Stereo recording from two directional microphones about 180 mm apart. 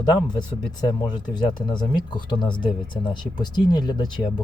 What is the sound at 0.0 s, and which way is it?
Speech, 25° left (ahead or behind).